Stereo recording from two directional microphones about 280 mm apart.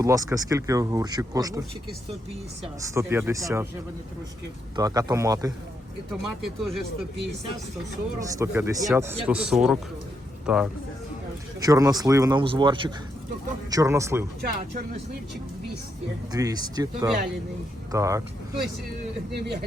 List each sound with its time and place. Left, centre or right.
0.0 s speech: centre
2.9 s speech: centre
4.8 s speech: centre
6.6 s speech: centre
8.2 s speech: centre
11.6 s speech: centre
16.3 s speech: centre
19.3 s a man's voice: right